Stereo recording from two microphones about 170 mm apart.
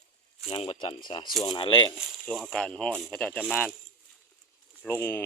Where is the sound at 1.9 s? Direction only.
Centre (ahead or behind).